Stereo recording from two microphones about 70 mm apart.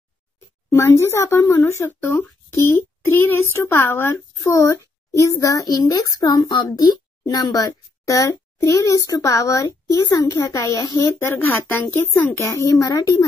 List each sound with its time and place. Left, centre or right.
0.7 s a child's voice: left
2.0 s a child's voice: left
11.3 s a child's voice: left